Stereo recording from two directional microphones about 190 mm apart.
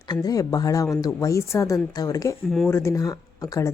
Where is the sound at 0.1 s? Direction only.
20° left (ahead or behind).